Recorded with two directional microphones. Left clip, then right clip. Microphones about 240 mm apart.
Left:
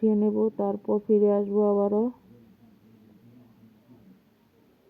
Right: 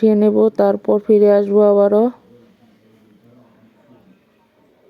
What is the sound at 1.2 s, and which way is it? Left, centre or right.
Speech, right.